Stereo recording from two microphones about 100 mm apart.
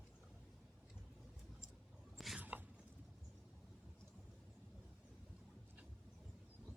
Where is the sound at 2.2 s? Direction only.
Centre (ahead or behind).